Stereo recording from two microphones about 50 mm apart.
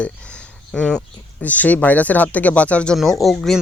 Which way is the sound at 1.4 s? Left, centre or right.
Left.